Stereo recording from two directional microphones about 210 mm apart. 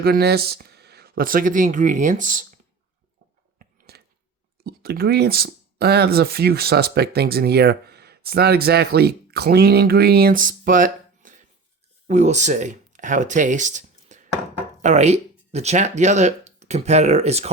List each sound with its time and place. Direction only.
0.0 s speech: 50° right (ahead or behind)
3.6 s a sound: 50° right (ahead or behind)
4.6 s speech: 50° right (ahead or behind); by 17.5 s 30° right (ahead or behind)